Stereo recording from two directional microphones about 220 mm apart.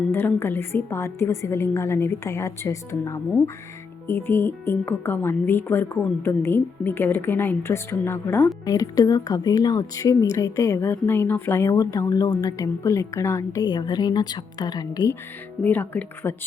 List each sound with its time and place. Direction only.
0.1 s speech: 10° left (ahead or behind)